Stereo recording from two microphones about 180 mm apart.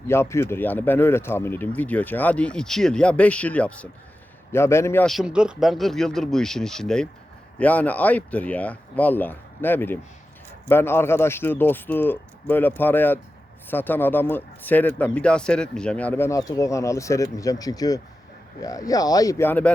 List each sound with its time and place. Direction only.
0.1 s speech: 15° left (ahead or behind)
5.0 s speech: centre (ahead or behind)